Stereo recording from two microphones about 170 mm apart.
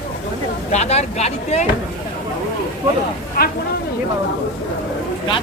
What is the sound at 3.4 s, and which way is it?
Speech, 65° left (ahead or behind).